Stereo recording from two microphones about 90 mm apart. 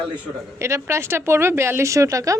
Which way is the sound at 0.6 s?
30° right (ahead or behind).